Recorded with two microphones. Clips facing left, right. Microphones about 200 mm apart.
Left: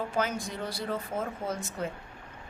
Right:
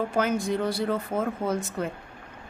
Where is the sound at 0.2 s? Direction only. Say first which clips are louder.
Right 7 dB; 55° right (ahead or behind).